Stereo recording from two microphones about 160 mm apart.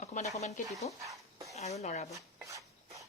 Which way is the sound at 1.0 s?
20° right (ahead or behind).